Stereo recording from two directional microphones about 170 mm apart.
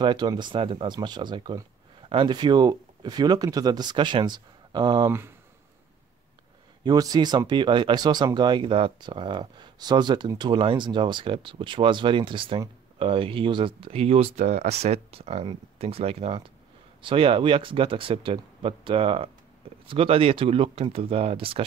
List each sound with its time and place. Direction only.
0.0 s speech: 25° right (ahead or behind)
6.8 s speech: 20° right (ahead or behind)